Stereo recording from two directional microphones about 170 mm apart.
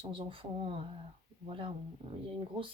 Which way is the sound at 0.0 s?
30° right (ahead or behind).